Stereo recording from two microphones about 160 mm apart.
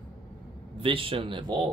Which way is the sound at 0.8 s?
35° right (ahead or behind).